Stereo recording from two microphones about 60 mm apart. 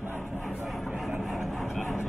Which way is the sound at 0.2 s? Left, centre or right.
Centre.